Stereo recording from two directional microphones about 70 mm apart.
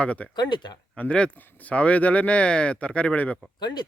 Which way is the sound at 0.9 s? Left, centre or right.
Centre.